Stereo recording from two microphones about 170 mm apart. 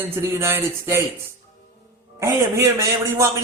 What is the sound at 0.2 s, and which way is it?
Speech, 15° right (ahead or behind).